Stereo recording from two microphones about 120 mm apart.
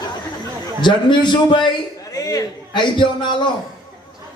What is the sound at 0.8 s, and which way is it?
Speech, 40° left (ahead or behind).